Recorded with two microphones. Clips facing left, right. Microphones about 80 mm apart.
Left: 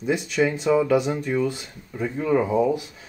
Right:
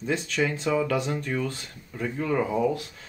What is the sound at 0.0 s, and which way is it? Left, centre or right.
Speech, centre.